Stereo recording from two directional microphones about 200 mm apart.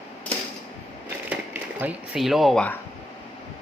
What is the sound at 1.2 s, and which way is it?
Speech, 10° right (ahead or behind).